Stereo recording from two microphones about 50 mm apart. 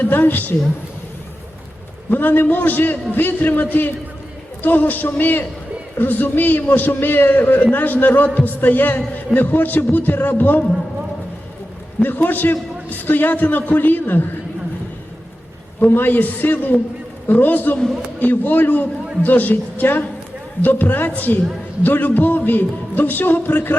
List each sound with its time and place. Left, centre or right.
0.0 s a man's voice: left
2.0 s a man's voice: left
12.0 s a man's voice: left
15.8 s a man's voice: left